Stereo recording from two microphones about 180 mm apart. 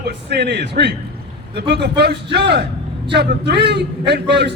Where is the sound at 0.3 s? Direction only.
70° right (ahead or behind).